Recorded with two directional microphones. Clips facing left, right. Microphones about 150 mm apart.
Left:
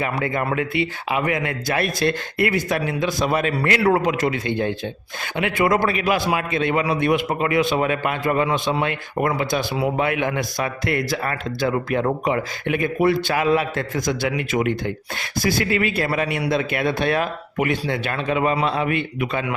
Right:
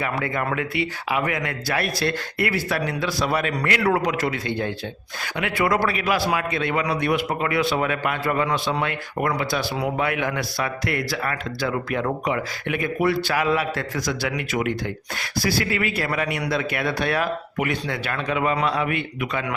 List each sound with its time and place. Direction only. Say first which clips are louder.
0.0 s speech: left 2 dB; 25° left (ahead or behind)